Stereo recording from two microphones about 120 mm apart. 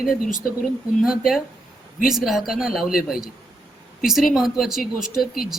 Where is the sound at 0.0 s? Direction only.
5° right (ahead or behind).